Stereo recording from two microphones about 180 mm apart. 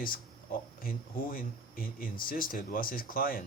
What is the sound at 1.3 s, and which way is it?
Speech, 50° left (ahead or behind).